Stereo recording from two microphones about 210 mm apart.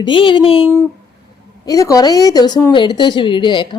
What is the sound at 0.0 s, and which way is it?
Speech, 25° left (ahead or behind).